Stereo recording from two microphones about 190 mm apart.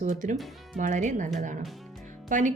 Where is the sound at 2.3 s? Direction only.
40° right (ahead or behind).